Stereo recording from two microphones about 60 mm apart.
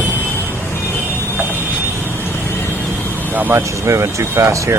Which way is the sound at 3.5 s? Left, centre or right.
Right.